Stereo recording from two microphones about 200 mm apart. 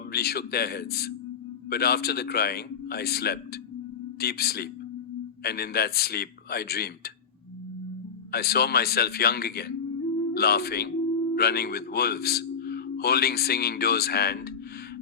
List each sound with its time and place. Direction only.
0.1 s speech: 50° left (ahead or behind)
8.3 s speech: 50° left (ahead or behind)